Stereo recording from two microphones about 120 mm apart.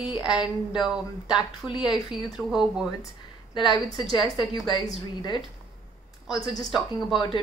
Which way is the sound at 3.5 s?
40° left (ahead or behind).